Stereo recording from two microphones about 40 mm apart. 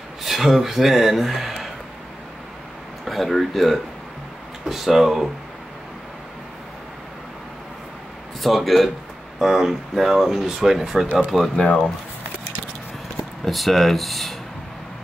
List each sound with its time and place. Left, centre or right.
0.2 s speech: centre
3.1 s speech: centre
8.4 s speech: centre
11.5 s speech: centre
13.4 s speech: centre